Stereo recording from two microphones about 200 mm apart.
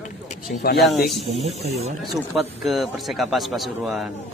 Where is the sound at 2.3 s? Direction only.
Centre (ahead or behind).